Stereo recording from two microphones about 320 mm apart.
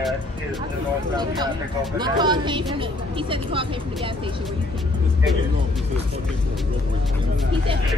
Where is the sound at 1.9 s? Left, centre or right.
Centre.